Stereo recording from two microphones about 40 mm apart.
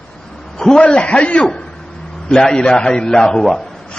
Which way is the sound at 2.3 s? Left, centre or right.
Centre.